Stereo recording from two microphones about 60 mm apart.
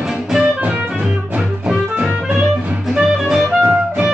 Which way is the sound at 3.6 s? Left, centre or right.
Right.